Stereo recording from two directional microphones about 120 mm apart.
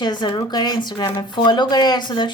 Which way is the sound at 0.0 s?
40° left (ahead or behind).